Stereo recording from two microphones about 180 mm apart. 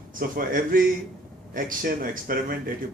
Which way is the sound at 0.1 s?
50° right (ahead or behind).